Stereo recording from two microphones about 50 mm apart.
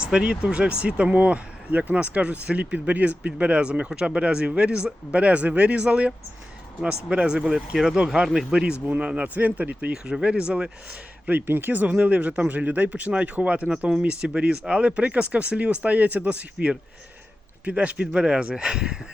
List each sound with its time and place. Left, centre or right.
0.0 s speech: centre
9.0 s speech: right
9.9 s speech: centre
11.3 s speech: right; by 18.9 s centre